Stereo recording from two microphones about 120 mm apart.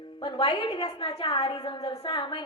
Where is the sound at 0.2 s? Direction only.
40° left (ahead or behind).